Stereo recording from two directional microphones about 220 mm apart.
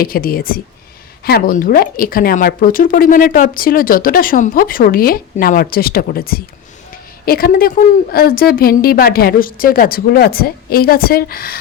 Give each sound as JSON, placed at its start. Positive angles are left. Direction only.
{"t": 0.0, "sound": "a woman's voice", "side_deg": 40}